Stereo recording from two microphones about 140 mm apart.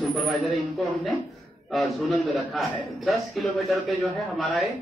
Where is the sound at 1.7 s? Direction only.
Centre (ahead or behind).